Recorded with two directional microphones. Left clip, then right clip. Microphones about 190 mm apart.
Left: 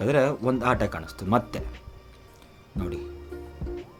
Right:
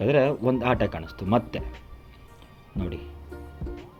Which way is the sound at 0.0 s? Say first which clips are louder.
Right 1 dB; centre (ahead or behind).